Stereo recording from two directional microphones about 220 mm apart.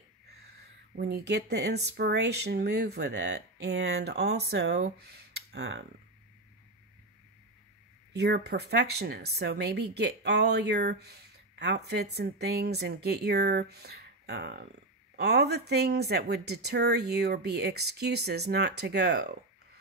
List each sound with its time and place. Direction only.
0.9 s a woman's voice: 45° right (ahead or behind)
8.1 s a woman's voice: 50° right (ahead or behind)